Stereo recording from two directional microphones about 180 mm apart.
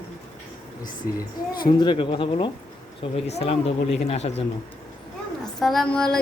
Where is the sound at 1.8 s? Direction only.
25° left (ahead or behind).